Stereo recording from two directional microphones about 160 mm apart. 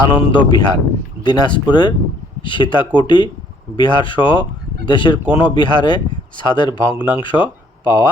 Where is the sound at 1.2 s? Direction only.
25° left (ahead or behind).